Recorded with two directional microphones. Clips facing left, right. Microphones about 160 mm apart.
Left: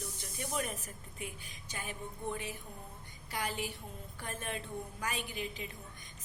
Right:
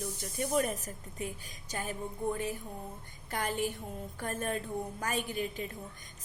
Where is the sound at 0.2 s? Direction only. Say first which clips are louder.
Right 8 dB; 45° right (ahead or behind).